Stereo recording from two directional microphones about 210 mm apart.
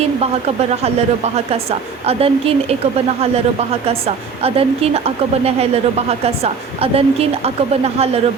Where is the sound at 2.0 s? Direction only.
30° right (ahead or behind).